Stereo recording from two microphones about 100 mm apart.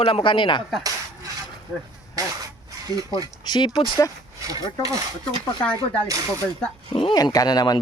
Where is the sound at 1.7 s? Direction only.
5° right (ahead or behind).